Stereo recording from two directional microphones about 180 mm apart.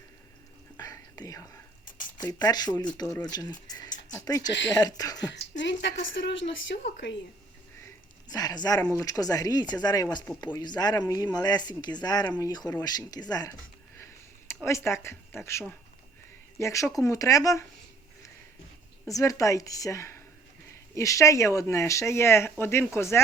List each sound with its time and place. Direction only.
0.8 s whispering: 20° left (ahead or behind)
2.1 s speech: 20° left (ahead or behind)
5.3 s a woman's voice: 80° left
8.3 s speech: 20° left (ahead or behind)
14.5 s speech: 15° left (ahead or behind)
19.0 s speech: 20° left (ahead or behind)